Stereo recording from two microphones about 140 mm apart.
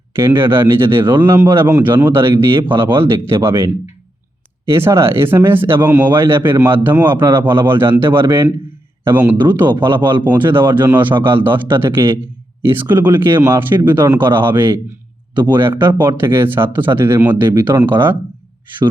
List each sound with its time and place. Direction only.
0.1 s speech: 15° right (ahead or behind)
4.7 s speech: 20° right (ahead or behind)